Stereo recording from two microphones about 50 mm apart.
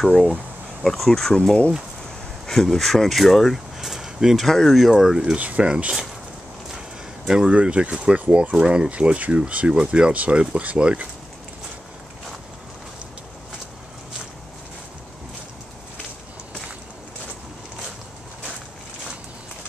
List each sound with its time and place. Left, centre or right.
0.8 s speech: centre
1.3 s speech: centre
2.4 s speech: centre
4.9 s speech: centre
5.4 s speech: right
5.7 s speech: centre
7.2 s speech: centre